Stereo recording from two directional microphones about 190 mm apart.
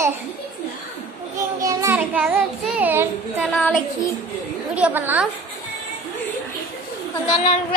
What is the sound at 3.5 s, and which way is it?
Child singing, 5° left (ahead or behind).